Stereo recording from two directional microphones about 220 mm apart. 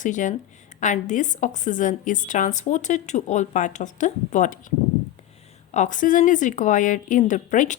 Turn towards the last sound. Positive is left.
turn(degrees=35)  # may be behind; listen again after turning